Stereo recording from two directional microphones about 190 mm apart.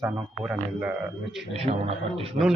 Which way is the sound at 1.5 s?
30° right (ahead or behind).